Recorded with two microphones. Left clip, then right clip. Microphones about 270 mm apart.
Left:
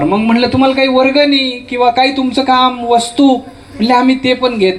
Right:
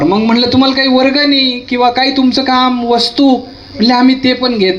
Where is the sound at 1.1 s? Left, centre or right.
Right.